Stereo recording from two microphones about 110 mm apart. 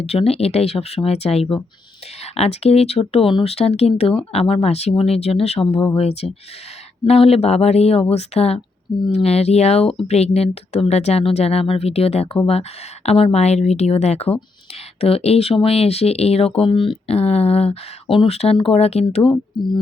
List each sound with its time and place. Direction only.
0.0 s speech: 65° left (ahead or behind)